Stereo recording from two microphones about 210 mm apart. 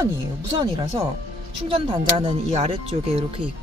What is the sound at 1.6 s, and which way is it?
Speech, 25° right (ahead or behind).